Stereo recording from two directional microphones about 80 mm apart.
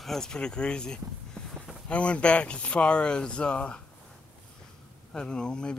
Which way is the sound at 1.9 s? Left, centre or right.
Centre.